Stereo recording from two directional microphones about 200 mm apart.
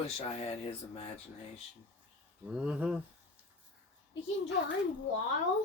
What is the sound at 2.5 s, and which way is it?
Speech, 5° right (ahead or behind).